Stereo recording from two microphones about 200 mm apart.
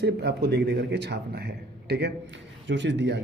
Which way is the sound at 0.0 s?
55° right (ahead or behind).